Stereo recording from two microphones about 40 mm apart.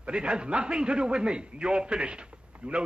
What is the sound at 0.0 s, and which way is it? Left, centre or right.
A man's voice, right.